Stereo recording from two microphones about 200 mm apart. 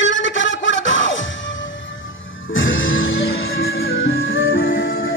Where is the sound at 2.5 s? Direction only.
70° left (ahead or behind).